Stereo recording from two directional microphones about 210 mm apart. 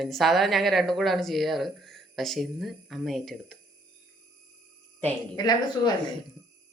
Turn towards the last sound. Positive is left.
turn(degrees=20)  # may be behind; listen again after turning